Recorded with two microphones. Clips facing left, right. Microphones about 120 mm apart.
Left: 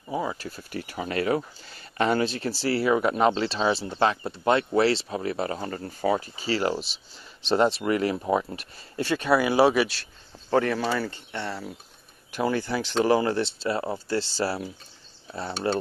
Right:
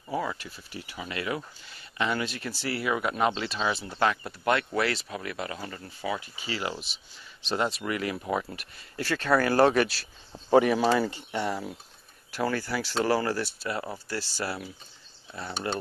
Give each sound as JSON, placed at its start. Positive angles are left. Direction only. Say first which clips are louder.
{"t": 0.1, "sound": "a sound", "louder": "left 2 dB", "side_deg": 20}
{"t": 0.4, "sound": "speech", "louder": "left 7 dB", "side_deg": 40}
{"t": 2.2, "sound": "speech", "louder": "left 7 dB", "side_deg": 30}
{"t": 10.5, "sound": "speech", "louder": "right 3 dB", "side_deg": -15}
{"t": 12.3, "sound": "speech", "louder": "left 3 dB", "side_deg": 20}